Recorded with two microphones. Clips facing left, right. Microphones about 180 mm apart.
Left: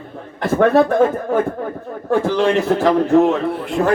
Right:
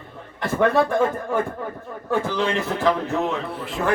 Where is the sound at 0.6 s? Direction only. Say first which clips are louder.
Left 6 dB; 45° left (ahead or behind).